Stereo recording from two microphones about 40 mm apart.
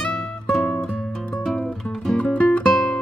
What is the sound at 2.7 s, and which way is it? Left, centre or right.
Music, centre.